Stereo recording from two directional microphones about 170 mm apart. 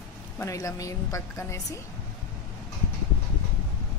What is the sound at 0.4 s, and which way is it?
Speech, 20° left (ahead or behind).